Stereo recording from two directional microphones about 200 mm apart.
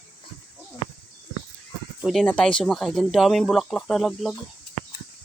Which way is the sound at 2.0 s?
Centre (ahead or behind).